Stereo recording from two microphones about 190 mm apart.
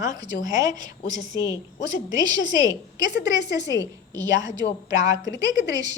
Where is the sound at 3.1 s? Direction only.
65° left (ahead or behind).